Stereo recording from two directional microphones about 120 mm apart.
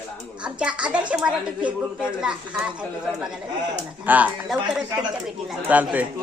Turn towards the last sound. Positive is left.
turn(degrees=-10)  # may be behind; listen again after turning